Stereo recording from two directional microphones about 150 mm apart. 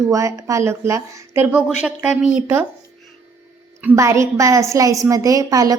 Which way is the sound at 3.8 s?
20° right (ahead or behind).